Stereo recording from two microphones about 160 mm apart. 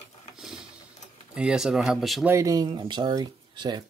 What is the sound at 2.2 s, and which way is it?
Speech, 20° right (ahead or behind).